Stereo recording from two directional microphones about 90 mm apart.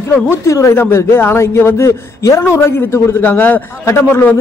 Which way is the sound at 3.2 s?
20° left (ahead or behind).